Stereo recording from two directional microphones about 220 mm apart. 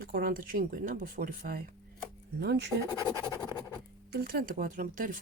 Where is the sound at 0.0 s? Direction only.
45° right (ahead or behind).